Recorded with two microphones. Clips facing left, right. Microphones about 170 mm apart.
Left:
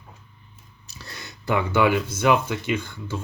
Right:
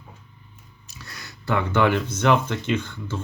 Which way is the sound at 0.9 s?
30° left (ahead or behind).